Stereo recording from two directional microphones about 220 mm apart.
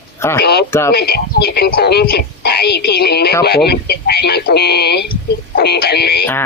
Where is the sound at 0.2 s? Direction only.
10° left (ahead or behind).